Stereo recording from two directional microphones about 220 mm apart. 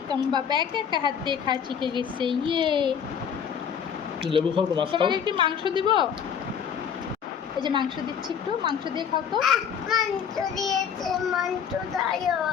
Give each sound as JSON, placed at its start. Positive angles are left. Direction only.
{"t": 0.1, "sound": "a woman's voice", "side_deg": -20}
{"t": 4.3, "sound": "a woman's voice", "side_deg": -20}
{"t": 7.6, "sound": "a woman's voice", "side_deg": -20}
{"t": 9.4, "sound": "child singing", "side_deg": 0}